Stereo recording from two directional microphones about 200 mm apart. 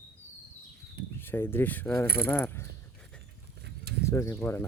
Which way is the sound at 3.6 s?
55° right (ahead or behind).